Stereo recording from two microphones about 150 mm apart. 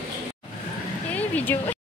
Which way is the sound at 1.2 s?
10° left (ahead or behind).